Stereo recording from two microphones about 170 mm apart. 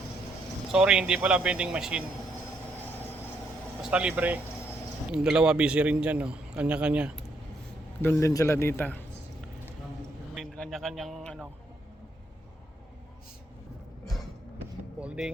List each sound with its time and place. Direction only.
0.7 s speech: 5° right (ahead or behind)
3.8 s a man's voice: 5° right (ahead or behind)
8.0 s a man's voice: 20° left (ahead or behind)
10.3 s a man's voice: 5° left (ahead or behind)
15.0 s a man's voice: 5° right (ahead or behind)